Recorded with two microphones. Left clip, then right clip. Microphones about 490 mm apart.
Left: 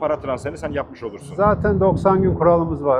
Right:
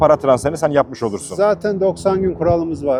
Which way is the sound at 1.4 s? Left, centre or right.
Centre.